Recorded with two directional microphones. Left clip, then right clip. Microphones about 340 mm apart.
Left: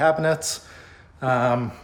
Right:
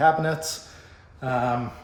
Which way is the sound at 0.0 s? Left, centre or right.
Centre.